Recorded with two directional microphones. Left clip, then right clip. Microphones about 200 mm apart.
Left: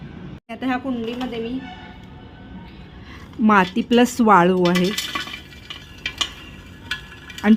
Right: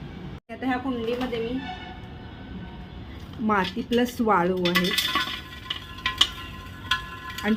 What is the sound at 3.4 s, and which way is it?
Speech, 45° left (ahead or behind).